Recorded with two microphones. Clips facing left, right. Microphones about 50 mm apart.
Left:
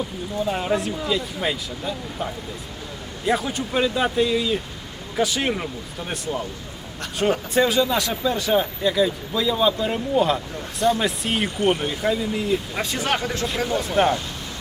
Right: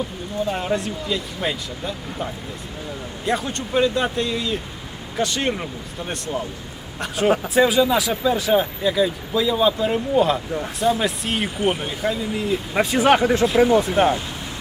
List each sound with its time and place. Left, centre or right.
0.4 s speech: centre
12.7 s speech: centre
13.9 s speech: centre